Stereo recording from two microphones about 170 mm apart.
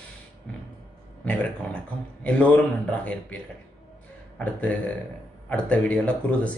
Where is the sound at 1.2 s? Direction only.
10° left (ahead or behind).